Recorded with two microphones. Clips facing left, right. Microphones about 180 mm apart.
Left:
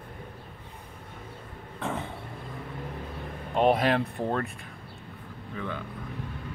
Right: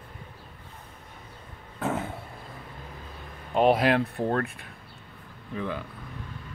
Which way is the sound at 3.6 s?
Centre (ahead or behind).